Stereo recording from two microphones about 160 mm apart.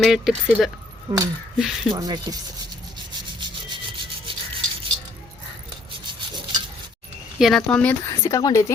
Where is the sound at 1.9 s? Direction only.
25° right (ahead or behind).